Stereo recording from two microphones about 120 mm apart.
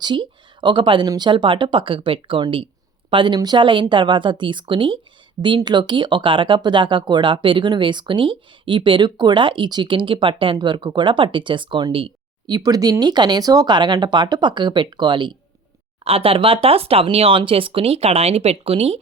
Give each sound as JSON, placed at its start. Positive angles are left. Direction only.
{"t": 0.0, "sound": "speech", "side_deg": -40}
{"t": 16.0, "sound": "speech", "side_deg": -50}